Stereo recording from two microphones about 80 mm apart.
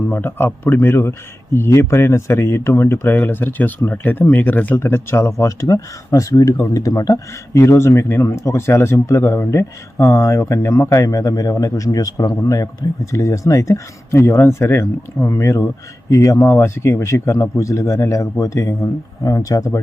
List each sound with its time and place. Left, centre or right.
0.1 s a man's voice: left